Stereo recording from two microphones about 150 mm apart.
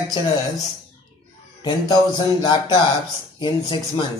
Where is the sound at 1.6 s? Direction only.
30° left (ahead or behind).